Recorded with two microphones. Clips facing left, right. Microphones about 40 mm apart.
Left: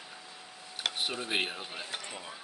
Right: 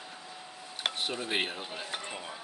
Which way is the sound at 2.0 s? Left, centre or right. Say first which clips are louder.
Right 3 dB; centre.